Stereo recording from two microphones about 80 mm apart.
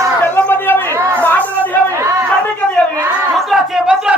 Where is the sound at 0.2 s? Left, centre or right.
Left.